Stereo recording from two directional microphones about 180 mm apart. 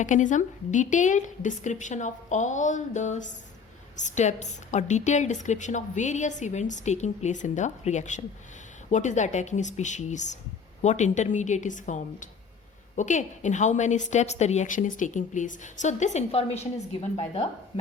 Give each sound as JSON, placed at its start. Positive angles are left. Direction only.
{"t": 0.0, "sound": "a woman's voice", "side_deg": 45}